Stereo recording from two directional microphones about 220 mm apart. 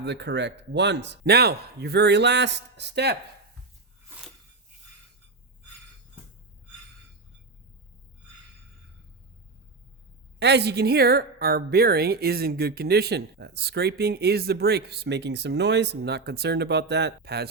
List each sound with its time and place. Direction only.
0.0 s a woman's voice: 50° right (ahead or behind)
10.4 s a woman's voice: 50° right (ahead or behind)